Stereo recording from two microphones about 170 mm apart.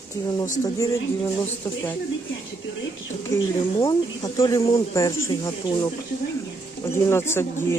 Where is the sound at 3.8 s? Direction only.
20° left (ahead or behind).